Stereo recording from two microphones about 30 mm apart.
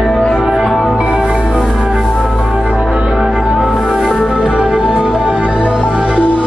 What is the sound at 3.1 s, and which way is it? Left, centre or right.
Music, centre.